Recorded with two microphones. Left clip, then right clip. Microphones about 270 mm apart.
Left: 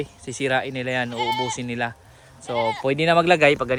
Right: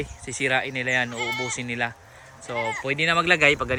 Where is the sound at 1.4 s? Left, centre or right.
Centre.